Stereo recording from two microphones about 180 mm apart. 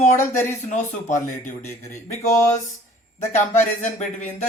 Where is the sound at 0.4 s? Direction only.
40° left (ahead or behind).